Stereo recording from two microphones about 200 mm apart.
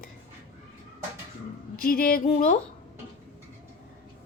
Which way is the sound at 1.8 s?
45° left (ahead or behind).